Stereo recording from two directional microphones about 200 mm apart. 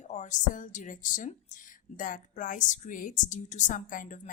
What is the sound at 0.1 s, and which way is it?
A woman's voice, 35° left (ahead or behind).